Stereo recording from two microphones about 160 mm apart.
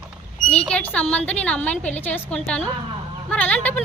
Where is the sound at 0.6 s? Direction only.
5° left (ahead or behind).